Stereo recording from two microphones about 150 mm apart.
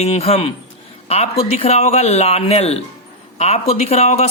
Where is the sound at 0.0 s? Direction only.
45° left (ahead or behind).